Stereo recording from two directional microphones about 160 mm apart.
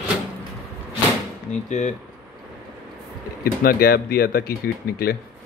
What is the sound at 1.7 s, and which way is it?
Speech, 45° left (ahead or behind).